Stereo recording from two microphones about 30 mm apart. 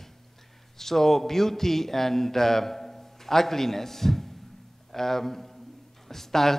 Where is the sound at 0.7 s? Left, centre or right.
Centre.